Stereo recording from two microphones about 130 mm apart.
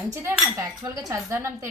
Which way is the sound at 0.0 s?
20° right (ahead or behind).